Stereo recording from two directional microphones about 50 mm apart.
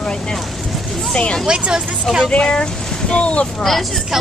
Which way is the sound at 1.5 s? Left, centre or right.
Centre.